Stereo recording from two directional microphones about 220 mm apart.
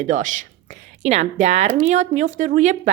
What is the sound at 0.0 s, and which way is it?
Speech, 35° right (ahead or behind).